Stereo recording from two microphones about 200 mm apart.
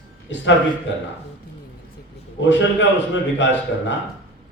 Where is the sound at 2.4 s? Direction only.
65° left (ahead or behind).